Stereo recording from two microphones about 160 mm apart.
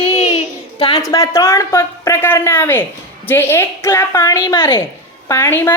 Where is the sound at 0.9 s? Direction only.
20° left (ahead or behind).